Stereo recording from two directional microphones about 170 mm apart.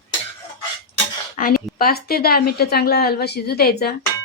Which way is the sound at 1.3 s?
55° left (ahead or behind).